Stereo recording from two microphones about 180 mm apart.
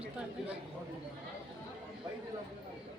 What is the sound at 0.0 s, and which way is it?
Speech, 5° right (ahead or behind).